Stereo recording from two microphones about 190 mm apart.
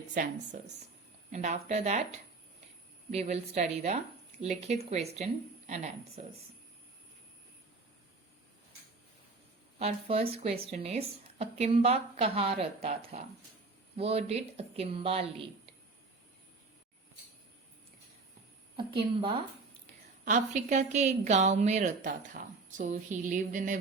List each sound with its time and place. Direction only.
0.1 s a woman's voice: 45° right (ahead or behind)
9.7 s a woman's voice: 35° right (ahead or behind)
20.2 s a woman's voice: 40° right (ahead or behind)